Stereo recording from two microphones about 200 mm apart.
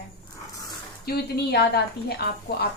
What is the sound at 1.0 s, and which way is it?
A woman's voice, 55° left (ahead or behind).